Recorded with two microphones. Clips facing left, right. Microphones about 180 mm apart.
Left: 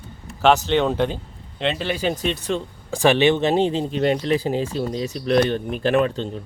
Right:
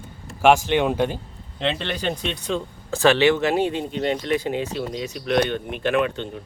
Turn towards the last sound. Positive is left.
turn(degrees=35)  # may be behind; listen again after turning